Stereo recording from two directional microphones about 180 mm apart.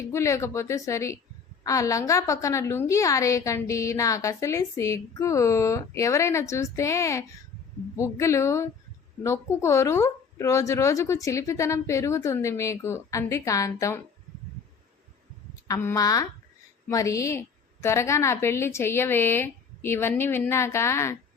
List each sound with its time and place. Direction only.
0.0 s a woman's voice: 15° left (ahead or behind)
15.6 s a woman's voice: 15° left (ahead or behind)